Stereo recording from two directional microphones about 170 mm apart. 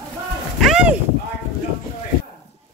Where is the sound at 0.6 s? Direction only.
5° right (ahead or behind).